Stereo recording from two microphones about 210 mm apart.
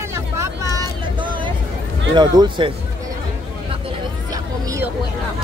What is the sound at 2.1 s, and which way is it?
Speech, 20° right (ahead or behind).